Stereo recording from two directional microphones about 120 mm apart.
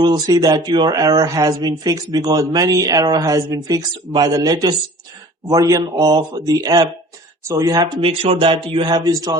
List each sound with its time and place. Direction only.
0.0 s speech: 35° right (ahead or behind)
8.0 s a sound: 50° right (ahead or behind)
9.0 s a man's voice: 30° right (ahead or behind)